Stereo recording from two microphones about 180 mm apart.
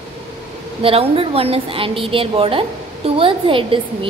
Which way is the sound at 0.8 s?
30° right (ahead or behind).